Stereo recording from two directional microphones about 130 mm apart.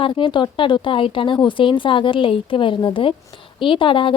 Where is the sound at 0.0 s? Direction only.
40° left (ahead or behind).